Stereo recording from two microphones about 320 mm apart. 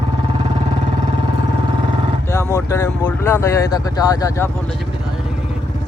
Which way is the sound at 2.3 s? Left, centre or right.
Centre.